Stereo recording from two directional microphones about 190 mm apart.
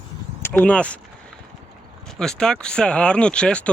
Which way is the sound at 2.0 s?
5° left (ahead or behind).